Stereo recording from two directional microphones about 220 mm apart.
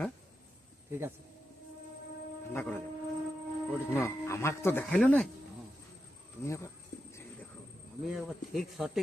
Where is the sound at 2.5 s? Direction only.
10° left (ahead or behind).